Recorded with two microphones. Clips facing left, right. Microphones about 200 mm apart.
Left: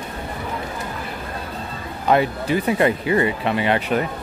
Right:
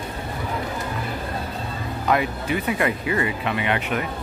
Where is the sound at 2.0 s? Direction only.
30° left (ahead or behind).